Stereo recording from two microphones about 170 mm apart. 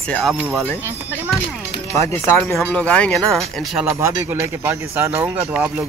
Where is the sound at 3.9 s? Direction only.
15° right (ahead or behind).